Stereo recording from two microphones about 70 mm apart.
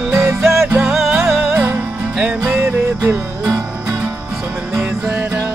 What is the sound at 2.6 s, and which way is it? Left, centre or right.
Music, right.